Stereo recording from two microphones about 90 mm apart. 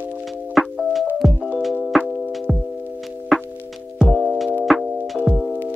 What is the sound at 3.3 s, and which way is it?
Music, centre (ahead or behind).